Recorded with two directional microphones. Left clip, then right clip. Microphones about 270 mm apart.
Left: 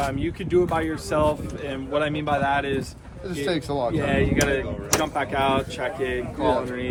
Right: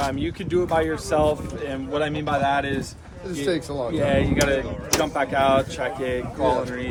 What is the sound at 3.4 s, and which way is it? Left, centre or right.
Speech, left.